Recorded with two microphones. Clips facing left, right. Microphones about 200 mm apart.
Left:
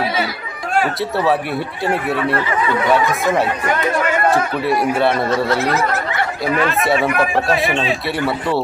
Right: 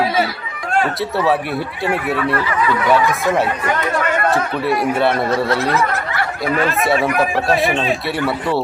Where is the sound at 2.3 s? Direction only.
25° left (ahead or behind).